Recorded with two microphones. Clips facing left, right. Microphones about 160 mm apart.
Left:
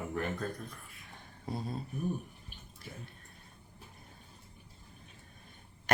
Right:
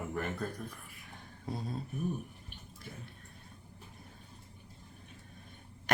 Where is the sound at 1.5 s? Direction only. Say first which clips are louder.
Left 1 dB; centre (ahead or behind).